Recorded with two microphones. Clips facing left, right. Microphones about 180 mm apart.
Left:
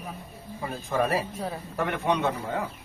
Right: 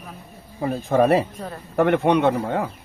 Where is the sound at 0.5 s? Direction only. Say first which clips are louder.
Right 8 dB; 60° right (ahead or behind).